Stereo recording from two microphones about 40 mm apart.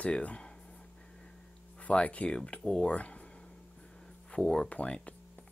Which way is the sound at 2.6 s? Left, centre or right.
Centre.